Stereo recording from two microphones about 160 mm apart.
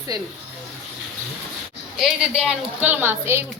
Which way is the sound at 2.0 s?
5° right (ahead or behind).